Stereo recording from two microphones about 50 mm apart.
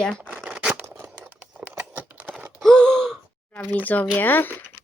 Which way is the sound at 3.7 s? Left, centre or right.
Left.